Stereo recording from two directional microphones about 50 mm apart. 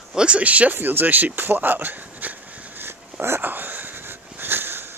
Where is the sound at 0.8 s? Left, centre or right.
Right.